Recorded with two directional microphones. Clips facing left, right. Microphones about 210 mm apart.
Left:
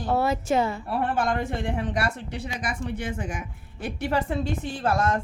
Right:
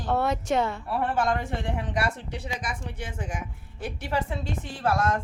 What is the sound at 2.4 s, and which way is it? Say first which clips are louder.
A woman's voice: left 5 dB; 65° left (ahead or behind).